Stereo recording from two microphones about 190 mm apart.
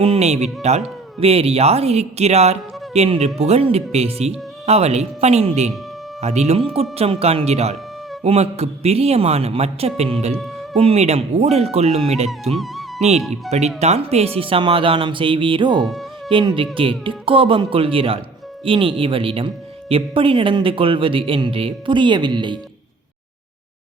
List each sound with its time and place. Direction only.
0.0 s speech: 35° right (ahead or behind)
12.3 s music: centre (ahead or behind)
13.0 s speech: 35° right (ahead or behind)
15.8 s music: centre (ahead or behind)
16.3 s speech: 25° right (ahead or behind)